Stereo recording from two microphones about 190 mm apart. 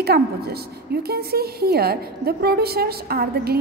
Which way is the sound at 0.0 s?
55° right (ahead or behind).